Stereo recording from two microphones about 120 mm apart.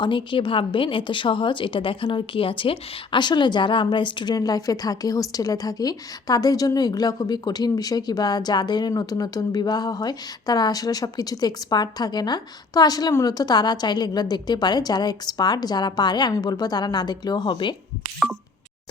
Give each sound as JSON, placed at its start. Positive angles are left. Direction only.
{"t": 0.0, "sound": "a woman's voice", "side_deg": 45}